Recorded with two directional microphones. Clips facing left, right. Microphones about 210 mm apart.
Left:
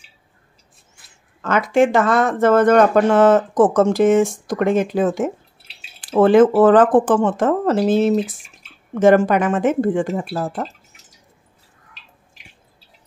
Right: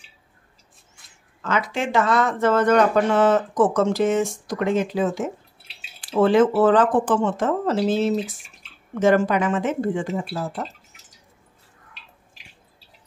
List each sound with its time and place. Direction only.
1.4 s speech: 50° left (ahead or behind)